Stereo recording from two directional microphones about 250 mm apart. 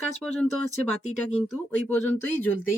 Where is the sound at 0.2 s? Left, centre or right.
Centre.